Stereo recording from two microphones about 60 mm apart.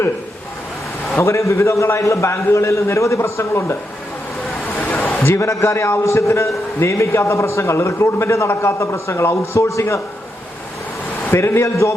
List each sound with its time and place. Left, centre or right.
1.2 s a man's voice: left
5.2 s a man's voice: left
11.3 s a man's voice: left